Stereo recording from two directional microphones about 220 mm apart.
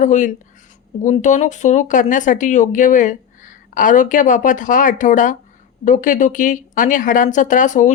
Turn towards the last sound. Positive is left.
turn(degrees=35)  # may be behind; listen again after turning